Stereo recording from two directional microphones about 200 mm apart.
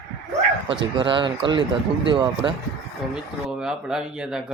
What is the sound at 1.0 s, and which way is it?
Speech, 25° right (ahead or behind).